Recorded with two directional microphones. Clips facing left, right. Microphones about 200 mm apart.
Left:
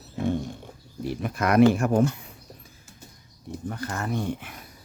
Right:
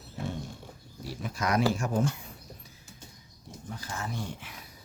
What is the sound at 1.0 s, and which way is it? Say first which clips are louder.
Speech: left 6 dB; 60° left (ahead or behind).